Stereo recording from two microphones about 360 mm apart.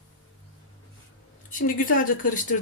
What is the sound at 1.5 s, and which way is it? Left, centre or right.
Speech, left.